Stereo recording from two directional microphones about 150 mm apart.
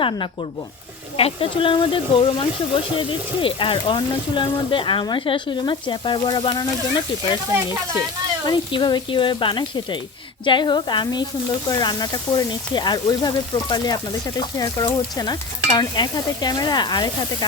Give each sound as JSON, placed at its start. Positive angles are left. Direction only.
{"t": 1.1, "sound": "speech", "side_deg": 40}
{"t": 8.4, "sound": "speech", "side_deg": 30}